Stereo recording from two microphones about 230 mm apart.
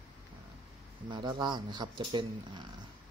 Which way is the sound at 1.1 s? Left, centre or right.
Centre.